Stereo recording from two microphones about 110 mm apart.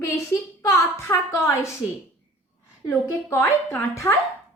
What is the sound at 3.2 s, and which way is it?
Speech, 25° left (ahead or behind).